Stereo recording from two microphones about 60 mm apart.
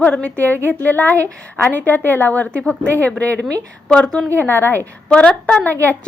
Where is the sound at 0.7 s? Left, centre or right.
Left.